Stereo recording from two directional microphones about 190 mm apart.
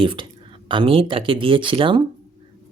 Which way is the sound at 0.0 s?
25° right (ahead or behind).